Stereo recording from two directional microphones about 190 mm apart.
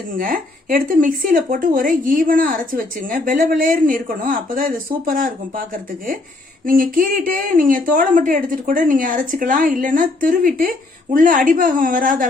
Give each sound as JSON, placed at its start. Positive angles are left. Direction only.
{"t": 0.1, "sound": "speech", "side_deg": -45}